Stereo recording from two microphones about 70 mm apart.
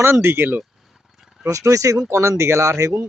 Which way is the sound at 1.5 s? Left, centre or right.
Right.